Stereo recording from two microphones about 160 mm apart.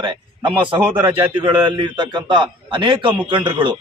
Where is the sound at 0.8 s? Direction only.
10° right (ahead or behind).